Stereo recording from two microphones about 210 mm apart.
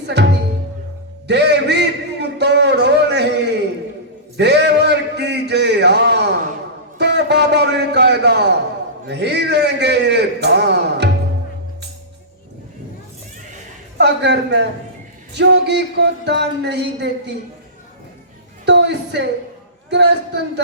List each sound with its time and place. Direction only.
0.1 s speech: 55° right (ahead or behind)
1.3 s a sound: 55° right (ahead or behind)
7.0 s a man's voice: 55° right (ahead or behind)
14.0 s speech: 55° right (ahead or behind)
18.6 s a sound: 55° right (ahead or behind)
19.9 s a man's voice: 55° right (ahead or behind)